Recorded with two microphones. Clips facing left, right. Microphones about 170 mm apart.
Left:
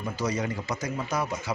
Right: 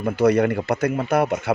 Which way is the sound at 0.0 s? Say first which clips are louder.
Right 12 dB; 60° right (ahead or behind).